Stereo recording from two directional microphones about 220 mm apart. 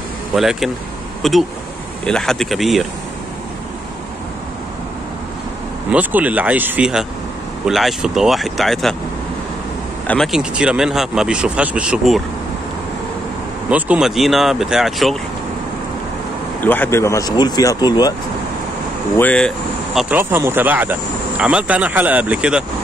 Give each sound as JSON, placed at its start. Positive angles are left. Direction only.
{"t": 0.4, "sound": "speech", "side_deg": 0}
{"t": 5.9, "sound": "speech", "side_deg": -5}
{"t": 10.0, "sound": "speech", "side_deg": 0}
{"t": 13.7, "sound": "speech", "side_deg": -5}
{"t": 16.6, "sound": "speech", "side_deg": 10}
{"t": 19.1, "sound": "speech", "side_deg": 5}